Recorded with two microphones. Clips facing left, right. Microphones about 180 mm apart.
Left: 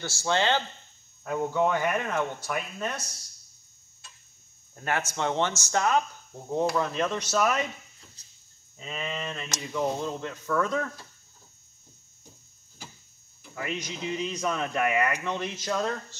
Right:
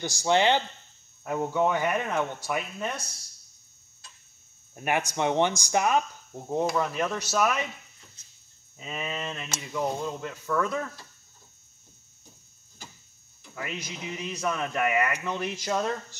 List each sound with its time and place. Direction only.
0.0 s speech: 15° right (ahead or behind)
4.7 s speech: 15° right (ahead or behind)
8.2 s a sound: 35° left (ahead or behind)
8.7 s speech: 10° right (ahead or behind)
13.4 s speech: 5° right (ahead or behind)